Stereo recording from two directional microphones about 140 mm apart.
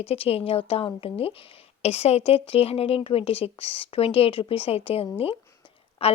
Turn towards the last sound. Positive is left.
turn(degrees=45)  # may be behind; listen again after turning